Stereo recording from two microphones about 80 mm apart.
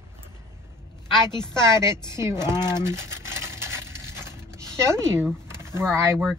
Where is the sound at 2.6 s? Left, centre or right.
Left.